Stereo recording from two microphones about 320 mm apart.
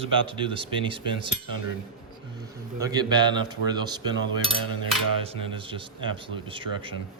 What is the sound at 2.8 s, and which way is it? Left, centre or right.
A man's voice, centre.